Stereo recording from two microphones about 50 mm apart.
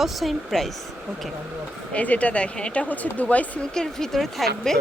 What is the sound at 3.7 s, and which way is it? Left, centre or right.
Speech, centre.